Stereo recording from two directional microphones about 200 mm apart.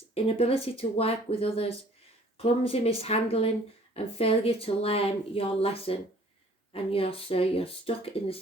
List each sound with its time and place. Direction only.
0.1 s speech: 30° left (ahead or behind)